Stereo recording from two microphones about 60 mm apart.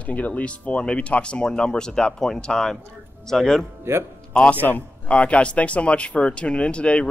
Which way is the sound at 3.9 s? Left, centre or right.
Right.